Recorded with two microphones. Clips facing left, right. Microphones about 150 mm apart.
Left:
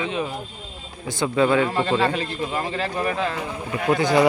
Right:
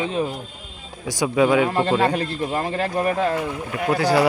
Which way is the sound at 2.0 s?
45° right (ahead or behind).